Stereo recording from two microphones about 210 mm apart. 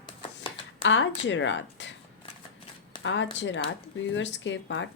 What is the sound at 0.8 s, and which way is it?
Speech, 60° left (ahead or behind).